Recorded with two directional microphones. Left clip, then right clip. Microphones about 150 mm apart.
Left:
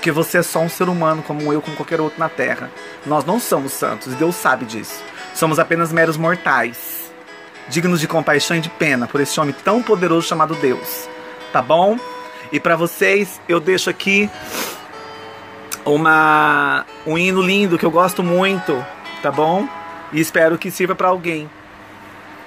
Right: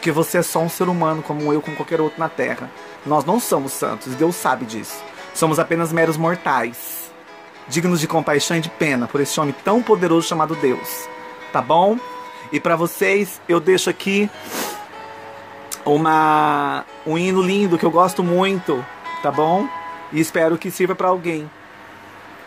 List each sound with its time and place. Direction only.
0.0 s speech: 20° right (ahead or behind)
2.0 s speech: 10° right (ahead or behind)
7.7 s speech: 20° right (ahead or behind)
15.7 s speech: 20° right (ahead or behind)